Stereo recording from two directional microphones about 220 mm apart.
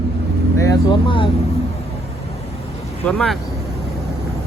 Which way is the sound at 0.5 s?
15° left (ahead or behind).